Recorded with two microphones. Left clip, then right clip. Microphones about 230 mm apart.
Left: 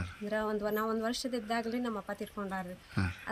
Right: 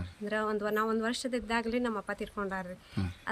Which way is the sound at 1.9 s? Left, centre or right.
Centre.